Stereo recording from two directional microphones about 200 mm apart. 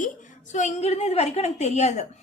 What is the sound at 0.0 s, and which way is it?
A woman's voice, 35° left (ahead or behind).